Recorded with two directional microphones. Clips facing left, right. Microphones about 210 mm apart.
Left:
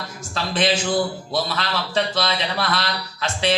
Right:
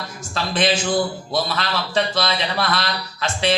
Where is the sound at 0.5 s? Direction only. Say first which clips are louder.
Right 1 dB; 50° right (ahead or behind).